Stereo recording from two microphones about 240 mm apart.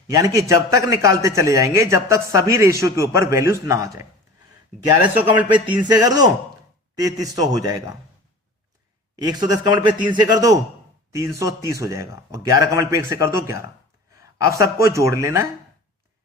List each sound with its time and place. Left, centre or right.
0.1 s a man's voice: centre
5.0 s a man's voice: centre
9.2 s a man's voice: centre